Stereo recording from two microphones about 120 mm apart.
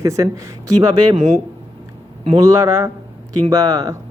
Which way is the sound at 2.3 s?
25° right (ahead or behind).